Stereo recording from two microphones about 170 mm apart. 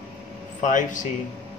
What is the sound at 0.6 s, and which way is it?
Speech, 50° left (ahead or behind).